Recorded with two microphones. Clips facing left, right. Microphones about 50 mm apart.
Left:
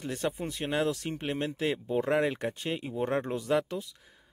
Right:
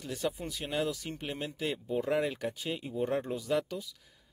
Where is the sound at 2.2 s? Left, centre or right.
Left.